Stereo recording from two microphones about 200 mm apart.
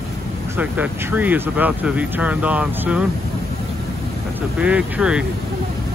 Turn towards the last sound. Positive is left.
turn(degrees=-5)  # may be behind; listen again after turning